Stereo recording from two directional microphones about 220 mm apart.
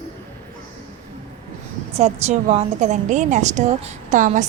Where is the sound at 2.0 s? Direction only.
30° right (ahead or behind).